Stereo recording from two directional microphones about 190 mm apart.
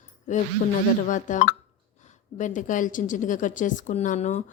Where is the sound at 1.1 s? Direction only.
40° left (ahead or behind).